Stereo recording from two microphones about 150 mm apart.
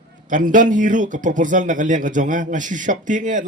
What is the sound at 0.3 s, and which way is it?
Speech, 60° right (ahead or behind).